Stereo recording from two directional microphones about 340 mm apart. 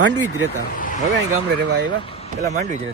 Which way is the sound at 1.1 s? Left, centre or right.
Right.